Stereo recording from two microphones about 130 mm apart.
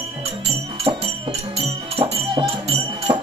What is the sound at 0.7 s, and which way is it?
Music, 45° right (ahead or behind).